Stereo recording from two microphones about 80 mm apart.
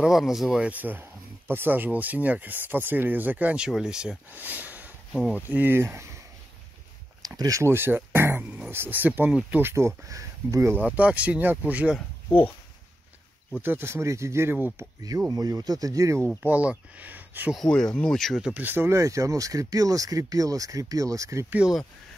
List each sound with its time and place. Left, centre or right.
0.0 s speech: centre
0.7 s speech: right
3.6 s speech: centre
4.3 s speech: right
7.2 s a sound: right
7.7 s speech: right
9.7 s speech: right
10.7 s speech: centre
12.3 s speech: left
13.6 s speech: right
15.0 s speech: right
16.4 s speech: centre
17.6 s speech: centre
18.5 s speech: right